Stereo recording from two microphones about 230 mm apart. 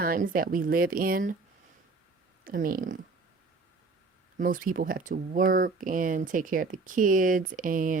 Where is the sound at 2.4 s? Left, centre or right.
Right.